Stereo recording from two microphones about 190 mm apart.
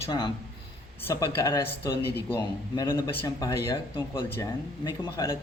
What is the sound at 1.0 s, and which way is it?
Speech, 15° left (ahead or behind).